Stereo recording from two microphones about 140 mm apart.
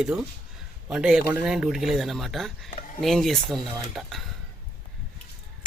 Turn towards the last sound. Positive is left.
turn(degrees=0)  # may be behind; listen again after turning